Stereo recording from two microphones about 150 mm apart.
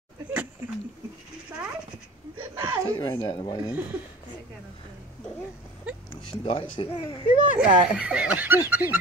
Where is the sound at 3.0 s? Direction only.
30° left (ahead or behind).